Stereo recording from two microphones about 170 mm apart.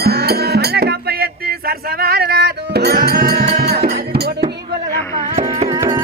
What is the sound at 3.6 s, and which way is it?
Music, 70° right (ahead or behind).